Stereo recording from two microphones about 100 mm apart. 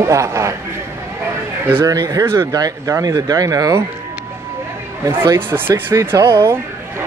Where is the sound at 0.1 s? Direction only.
30° right (ahead or behind).